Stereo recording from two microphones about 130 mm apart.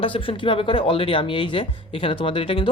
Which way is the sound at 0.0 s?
45° left (ahead or behind).